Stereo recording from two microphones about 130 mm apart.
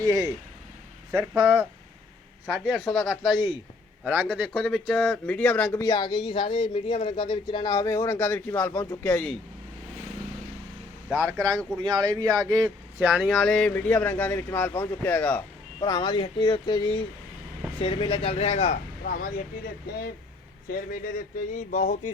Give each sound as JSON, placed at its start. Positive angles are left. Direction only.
{"t": 0.0, "sound": "speech", "side_deg": -25}
{"t": 1.4, "sound": "speech", "side_deg": -35}
{"t": 2.5, "sound": "speech", "side_deg": 0}
{"t": 4.0, "sound": "speech", "side_deg": -10}
{"t": 5.8, "sound": "speech", "side_deg": 35}
{"t": 9.0, "sound": "speech", "side_deg": 10}
{"t": 11.1, "sound": "speech", "side_deg": -15}
{"t": 13.0, "sound": "speech", "side_deg": -10}
{"t": 15.8, "sound": "speech", "side_deg": 35}
{"t": 19.0, "sound": "speech", "side_deg": 90}
{"t": 21.5, "sound": "a sound", "side_deg": 65}